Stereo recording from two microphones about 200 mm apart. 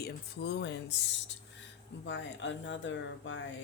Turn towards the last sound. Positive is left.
turn(degrees=70)  # may be behind; listen again after turning